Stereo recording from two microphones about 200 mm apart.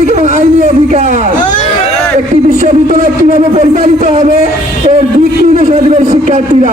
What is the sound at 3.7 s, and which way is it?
Speech, 35° right (ahead or behind).